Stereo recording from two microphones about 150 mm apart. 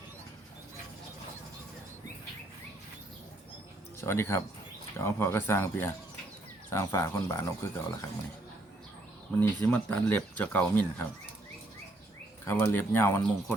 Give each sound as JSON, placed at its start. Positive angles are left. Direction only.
{"t": 4.0, "sound": "speech", "side_deg": 15}
{"t": 9.4, "sound": "speech", "side_deg": 10}
{"t": 12.5, "sound": "speech", "side_deg": 15}